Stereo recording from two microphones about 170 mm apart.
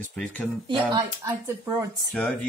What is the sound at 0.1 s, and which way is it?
Speech, 10° left (ahead or behind).